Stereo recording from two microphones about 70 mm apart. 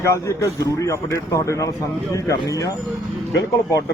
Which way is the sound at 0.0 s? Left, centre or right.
Left.